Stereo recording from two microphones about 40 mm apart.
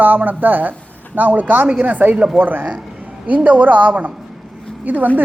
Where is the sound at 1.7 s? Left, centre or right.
Right.